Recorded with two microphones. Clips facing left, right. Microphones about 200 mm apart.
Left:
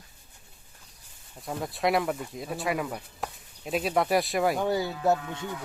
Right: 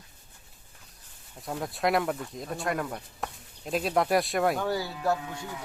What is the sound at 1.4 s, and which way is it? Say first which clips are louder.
Speech: even; centre (ahead or behind).